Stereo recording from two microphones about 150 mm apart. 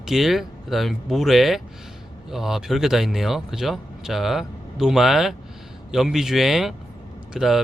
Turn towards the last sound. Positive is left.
turn(degrees=0)  # may be behind; listen again after turning